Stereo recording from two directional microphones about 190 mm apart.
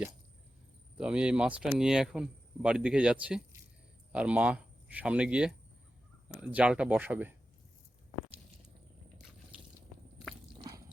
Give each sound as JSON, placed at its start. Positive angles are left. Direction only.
{"t": 0.9, "sound": "speech", "side_deg": -5}